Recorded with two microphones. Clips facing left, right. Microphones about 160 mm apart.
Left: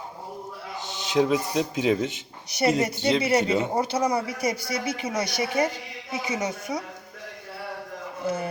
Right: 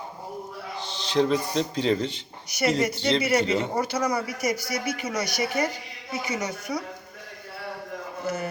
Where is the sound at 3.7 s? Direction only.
25° left (ahead or behind).